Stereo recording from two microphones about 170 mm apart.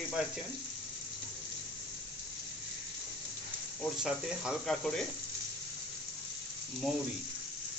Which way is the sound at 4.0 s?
5° right (ahead or behind).